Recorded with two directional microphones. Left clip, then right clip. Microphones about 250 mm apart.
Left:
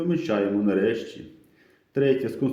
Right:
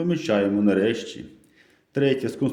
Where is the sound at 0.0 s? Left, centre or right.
Right.